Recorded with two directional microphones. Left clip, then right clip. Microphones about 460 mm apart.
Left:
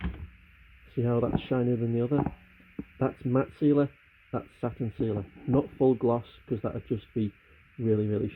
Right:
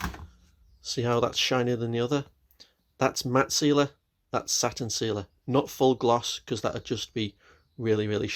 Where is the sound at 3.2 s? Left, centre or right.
Right.